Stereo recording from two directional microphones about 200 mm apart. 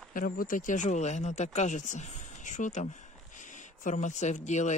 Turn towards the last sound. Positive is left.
turn(degrees=35)  # may be behind; listen again after turning